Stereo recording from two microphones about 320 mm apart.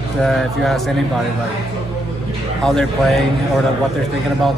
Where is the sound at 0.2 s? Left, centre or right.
Centre.